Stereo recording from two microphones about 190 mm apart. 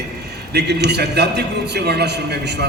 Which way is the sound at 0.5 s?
60° right (ahead or behind).